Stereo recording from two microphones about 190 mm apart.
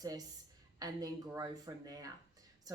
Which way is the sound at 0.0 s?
20° right (ahead or behind).